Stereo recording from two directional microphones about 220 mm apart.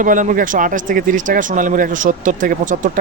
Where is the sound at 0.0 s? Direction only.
35° right (ahead or behind).